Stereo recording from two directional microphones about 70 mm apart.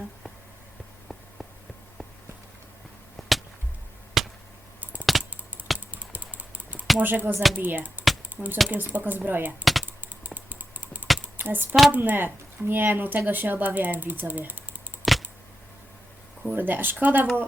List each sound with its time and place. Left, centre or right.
3.2 s chop: centre
4.8 s typing: right
7.0 s speech: right
8.4 s speech: centre
8.7 s speech: right
9.8 s computer keyboard: right
11.3 s speech: right
15.1 s a sound: centre
16.5 s speech: right